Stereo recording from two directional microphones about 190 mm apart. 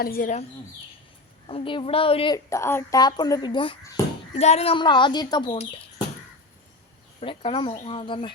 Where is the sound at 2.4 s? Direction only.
15° left (ahead or behind).